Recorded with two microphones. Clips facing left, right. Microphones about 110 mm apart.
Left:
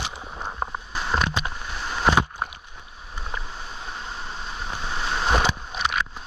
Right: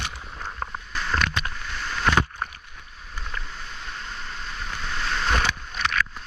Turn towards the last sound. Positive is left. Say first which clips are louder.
# left 2 dB
turn(degrees=15)  # may be behind; listen again after turning